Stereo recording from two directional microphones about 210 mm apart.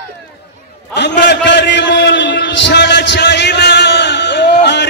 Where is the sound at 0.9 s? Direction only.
55° left (ahead or behind).